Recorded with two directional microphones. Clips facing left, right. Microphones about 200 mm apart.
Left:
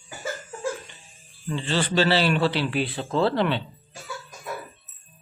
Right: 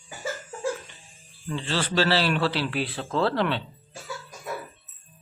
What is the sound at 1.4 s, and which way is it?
Speech, centre (ahead or behind).